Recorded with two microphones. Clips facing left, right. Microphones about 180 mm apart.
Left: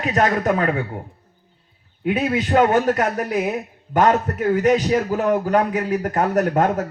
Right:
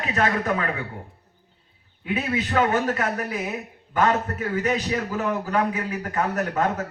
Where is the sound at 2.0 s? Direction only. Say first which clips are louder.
Left 5 dB; 45° left (ahead or behind).